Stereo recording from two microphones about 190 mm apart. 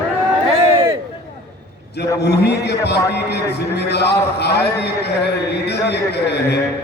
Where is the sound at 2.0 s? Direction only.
60° left (ahead or behind).